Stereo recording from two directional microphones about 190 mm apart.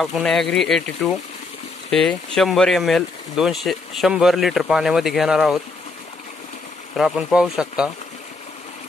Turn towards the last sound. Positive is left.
turn(degrees=-5)  # may be behind; listen again after turning